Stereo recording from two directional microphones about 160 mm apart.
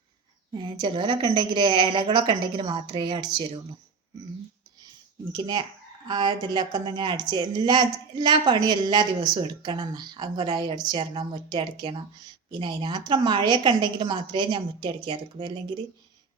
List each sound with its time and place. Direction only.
0.5 s a woman's voice: 30° right (ahead or behind)
5.3 s speech: 25° right (ahead or behind)